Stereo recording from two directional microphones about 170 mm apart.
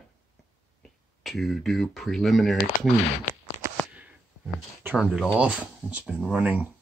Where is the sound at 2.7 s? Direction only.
50° left (ahead or behind).